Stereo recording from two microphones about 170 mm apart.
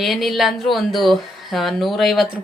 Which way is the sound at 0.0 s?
Centre (ahead or behind).